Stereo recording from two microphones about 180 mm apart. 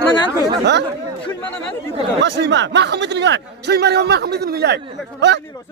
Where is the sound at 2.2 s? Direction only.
80° right.